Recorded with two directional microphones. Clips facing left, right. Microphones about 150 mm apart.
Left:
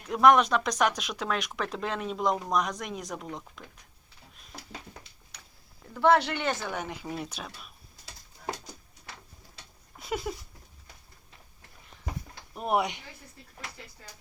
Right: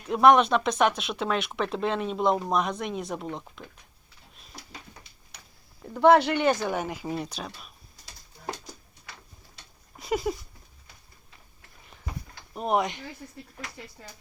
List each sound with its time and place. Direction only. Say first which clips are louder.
0.1 s speech: right 2 dB; 30° right (ahead or behind)
6.0 s speech: right 4 dB; 15° right (ahead or behind)
10.0 s a sound: right 5 dB; centre (ahead or behind)
12.5 s speech: right 2 dB; 5° left (ahead or behind)